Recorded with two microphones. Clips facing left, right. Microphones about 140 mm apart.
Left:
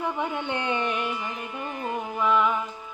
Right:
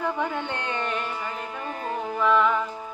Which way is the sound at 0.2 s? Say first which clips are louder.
Even; 15° left (ahead or behind).